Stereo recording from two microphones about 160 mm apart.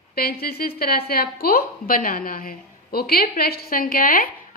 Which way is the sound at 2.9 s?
70° left (ahead or behind).